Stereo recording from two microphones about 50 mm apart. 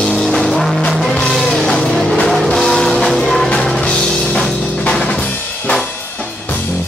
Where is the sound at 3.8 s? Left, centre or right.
Centre.